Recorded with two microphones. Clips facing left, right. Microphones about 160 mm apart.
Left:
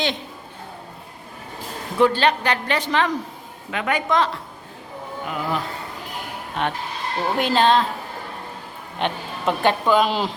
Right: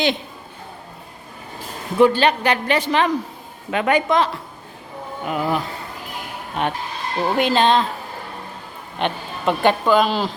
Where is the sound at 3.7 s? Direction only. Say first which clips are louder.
Right 6 dB; 30° right (ahead or behind).